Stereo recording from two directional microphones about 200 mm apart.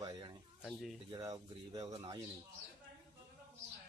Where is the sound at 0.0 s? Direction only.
20° right (ahead or behind).